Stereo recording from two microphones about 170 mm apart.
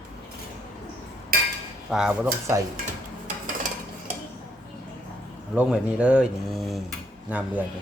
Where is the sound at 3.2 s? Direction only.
50° right (ahead or behind).